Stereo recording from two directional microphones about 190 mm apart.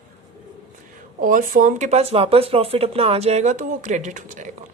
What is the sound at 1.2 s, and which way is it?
Speech, 45° right (ahead or behind).